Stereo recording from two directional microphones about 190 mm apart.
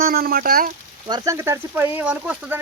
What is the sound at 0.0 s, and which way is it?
Speech, 50° right (ahead or behind).